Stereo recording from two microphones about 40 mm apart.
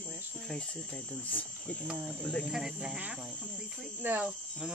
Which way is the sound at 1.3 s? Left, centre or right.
Left.